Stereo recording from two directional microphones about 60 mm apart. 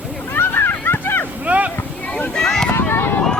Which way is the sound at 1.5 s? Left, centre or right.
Right.